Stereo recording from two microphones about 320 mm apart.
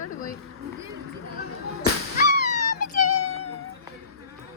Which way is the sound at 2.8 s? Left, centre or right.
Left.